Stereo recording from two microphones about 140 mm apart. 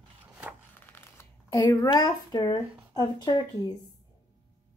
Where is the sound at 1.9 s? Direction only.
30° left (ahead or behind).